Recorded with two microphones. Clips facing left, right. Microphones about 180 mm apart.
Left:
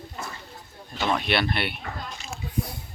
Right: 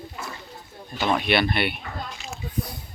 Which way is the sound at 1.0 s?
5° right (ahead or behind).